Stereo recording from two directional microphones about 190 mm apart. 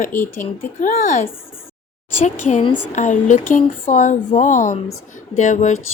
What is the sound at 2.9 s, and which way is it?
Speech, 40° left (ahead or behind).